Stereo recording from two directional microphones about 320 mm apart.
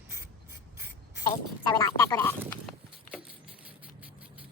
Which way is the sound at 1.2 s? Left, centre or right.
Centre.